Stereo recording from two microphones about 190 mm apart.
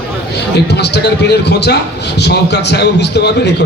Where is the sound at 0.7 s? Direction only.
60° left (ahead or behind).